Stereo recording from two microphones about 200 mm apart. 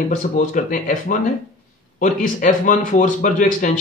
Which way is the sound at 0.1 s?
40° left (ahead or behind).